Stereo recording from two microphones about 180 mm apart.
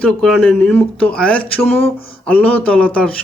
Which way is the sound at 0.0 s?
Centre (ahead or behind).